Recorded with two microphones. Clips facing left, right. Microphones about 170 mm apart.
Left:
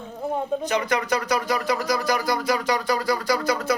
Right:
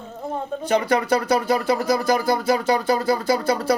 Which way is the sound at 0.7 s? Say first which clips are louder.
Right 7 dB; 30° right (ahead or behind).